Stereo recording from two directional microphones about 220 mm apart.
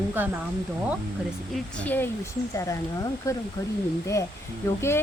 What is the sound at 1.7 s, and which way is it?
Speech, 5° left (ahead or behind).